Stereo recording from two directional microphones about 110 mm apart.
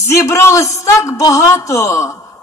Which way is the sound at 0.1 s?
25° left (ahead or behind).